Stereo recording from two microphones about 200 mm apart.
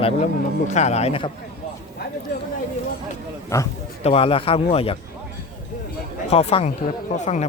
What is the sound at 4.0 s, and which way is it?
Speech, 30° left (ahead or behind).